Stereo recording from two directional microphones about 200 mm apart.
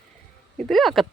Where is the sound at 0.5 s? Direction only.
Centre (ahead or behind).